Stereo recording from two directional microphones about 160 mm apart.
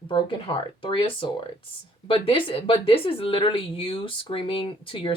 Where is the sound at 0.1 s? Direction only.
30° left (ahead or behind).